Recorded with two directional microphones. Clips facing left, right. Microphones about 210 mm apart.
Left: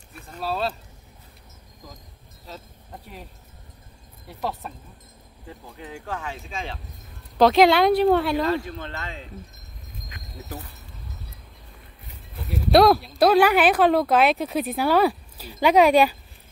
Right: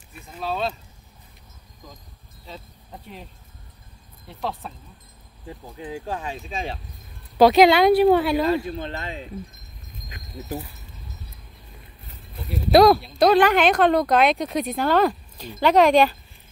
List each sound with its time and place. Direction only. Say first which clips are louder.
0.4 s speech: even; 5° left (ahead or behind)
2.4 s a sound: even; 5° left (ahead or behind)
4.3 s speech: even; 5° left (ahead or behind)
5.8 s speech: right 3 dB; 20° right (ahead or behind)
7.3 s speech: right 2 dB; centre (ahead or behind)
8.4 s speech: right 2 dB; 15° right (ahead or behind)
12.4 s speech: right 2 dB; centre (ahead or behind)